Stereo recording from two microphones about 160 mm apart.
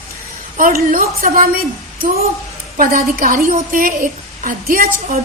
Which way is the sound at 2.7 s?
60° right (ahead or behind).